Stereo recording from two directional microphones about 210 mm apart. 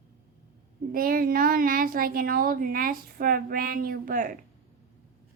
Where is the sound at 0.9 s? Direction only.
45° right (ahead or behind).